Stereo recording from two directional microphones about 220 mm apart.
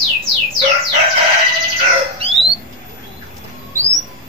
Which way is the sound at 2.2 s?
25° right (ahead or behind).